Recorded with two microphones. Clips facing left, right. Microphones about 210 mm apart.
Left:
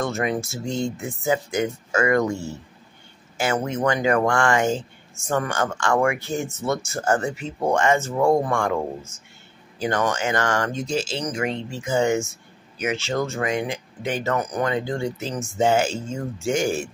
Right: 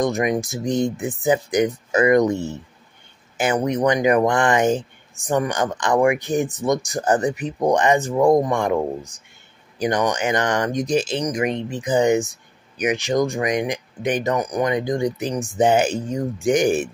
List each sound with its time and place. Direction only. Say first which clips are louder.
0.0 s speech: right 4 dB; 15° right (ahead or behind)